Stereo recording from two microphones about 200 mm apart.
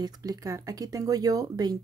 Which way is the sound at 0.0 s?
20° right (ahead or behind).